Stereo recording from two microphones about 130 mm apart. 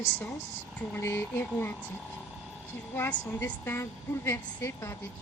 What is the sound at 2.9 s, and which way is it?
A woman's voice, 15° left (ahead or behind).